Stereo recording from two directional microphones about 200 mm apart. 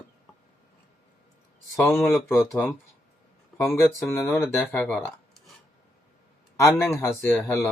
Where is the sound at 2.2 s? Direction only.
15° left (ahead or behind).